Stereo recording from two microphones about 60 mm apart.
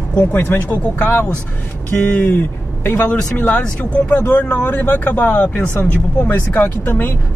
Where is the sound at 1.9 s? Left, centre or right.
Left.